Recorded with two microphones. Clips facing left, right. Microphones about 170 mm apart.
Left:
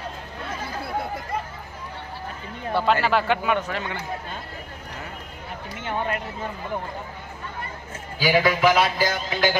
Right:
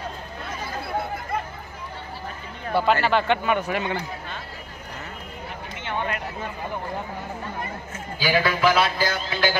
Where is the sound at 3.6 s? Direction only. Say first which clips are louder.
Right 3 dB; 10° right (ahead or behind).